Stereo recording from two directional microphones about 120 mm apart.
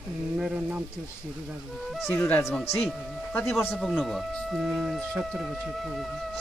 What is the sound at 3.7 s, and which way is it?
Speech, centre (ahead or behind).